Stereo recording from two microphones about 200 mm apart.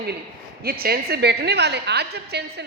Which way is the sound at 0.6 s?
50° right (ahead or behind).